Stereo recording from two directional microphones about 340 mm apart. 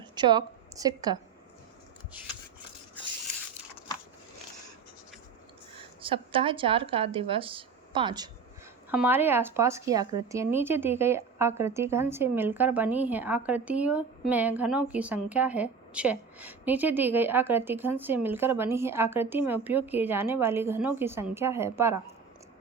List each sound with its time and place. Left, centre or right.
0.2 s a woman's voice: centre
6.0 s speech: centre